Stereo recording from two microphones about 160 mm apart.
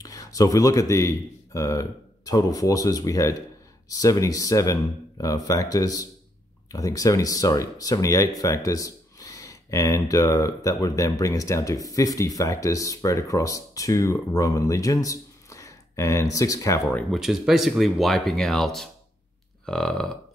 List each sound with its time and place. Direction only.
0.0 s speech: 20° left (ahead or behind)
16.9 s speech: centre (ahead or behind)